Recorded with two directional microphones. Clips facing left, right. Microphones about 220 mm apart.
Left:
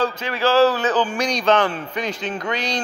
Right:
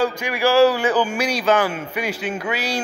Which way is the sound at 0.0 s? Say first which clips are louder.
Right 1 dB; 10° right (ahead or behind).